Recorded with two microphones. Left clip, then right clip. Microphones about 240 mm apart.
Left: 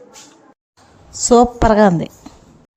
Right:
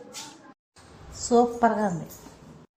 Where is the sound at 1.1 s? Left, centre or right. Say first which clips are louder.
Left 10 dB; left.